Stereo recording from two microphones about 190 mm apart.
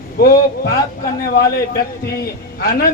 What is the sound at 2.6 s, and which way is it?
Speech, 50° left (ahead or behind).